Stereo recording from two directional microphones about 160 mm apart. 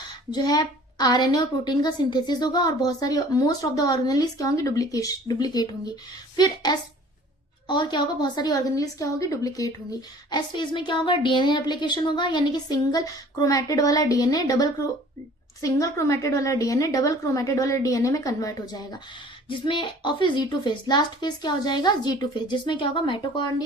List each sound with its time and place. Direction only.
0.3 s a child's voice: 25° left (ahead or behind)